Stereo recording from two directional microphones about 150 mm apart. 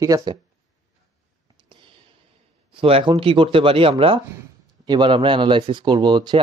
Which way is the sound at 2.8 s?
40° right (ahead or behind).